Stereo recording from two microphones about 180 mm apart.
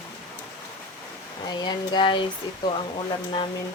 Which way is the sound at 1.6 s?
25° left (ahead or behind).